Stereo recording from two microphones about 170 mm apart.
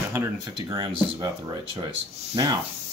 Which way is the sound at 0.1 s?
20° right (ahead or behind).